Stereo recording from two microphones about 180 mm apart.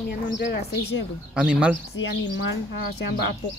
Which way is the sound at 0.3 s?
70° left (ahead or behind).